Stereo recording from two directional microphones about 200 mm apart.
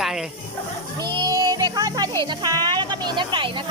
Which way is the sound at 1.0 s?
20° right (ahead or behind).